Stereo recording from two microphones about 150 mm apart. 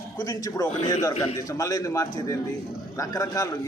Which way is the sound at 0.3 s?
25° left (ahead or behind).